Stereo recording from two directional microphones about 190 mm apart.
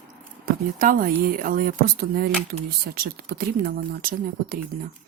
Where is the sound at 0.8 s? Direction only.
45° right (ahead or behind).